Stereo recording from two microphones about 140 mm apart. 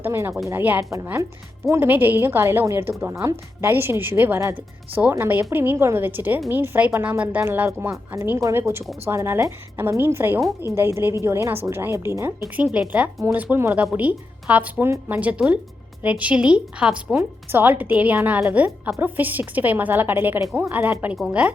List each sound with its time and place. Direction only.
0.0 s a woman's voice: 15° right (ahead or behind)